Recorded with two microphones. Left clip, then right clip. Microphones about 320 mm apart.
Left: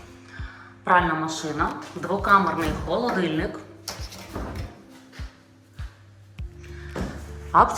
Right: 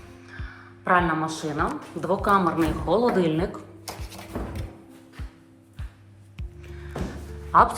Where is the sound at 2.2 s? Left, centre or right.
Centre.